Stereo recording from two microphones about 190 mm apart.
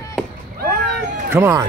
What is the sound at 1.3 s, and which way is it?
Speech, 15° right (ahead or behind).